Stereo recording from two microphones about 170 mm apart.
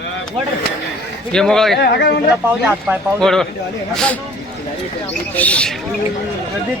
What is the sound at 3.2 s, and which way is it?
Speech, 5° left (ahead or behind).